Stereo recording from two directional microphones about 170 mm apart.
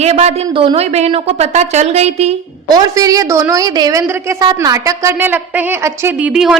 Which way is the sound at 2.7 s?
20° right (ahead or behind).